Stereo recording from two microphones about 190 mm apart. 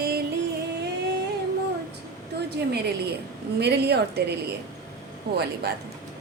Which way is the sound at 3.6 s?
60° right (ahead or behind).